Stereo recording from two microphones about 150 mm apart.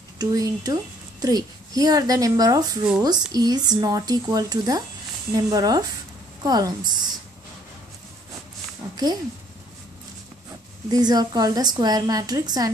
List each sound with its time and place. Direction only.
0.2 s speech: 25° right (ahead or behind)
8.9 s speech: 25° right (ahead or behind)
10.9 s speech: 25° right (ahead or behind)